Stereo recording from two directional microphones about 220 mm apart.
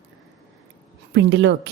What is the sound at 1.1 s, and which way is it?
Speech, 55° right (ahead or behind).